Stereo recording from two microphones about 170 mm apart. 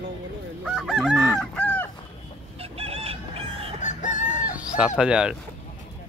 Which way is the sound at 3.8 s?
45° left (ahead or behind).